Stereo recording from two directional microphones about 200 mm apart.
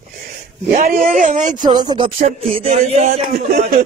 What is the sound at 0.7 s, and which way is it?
Speech, 40° right (ahead or behind).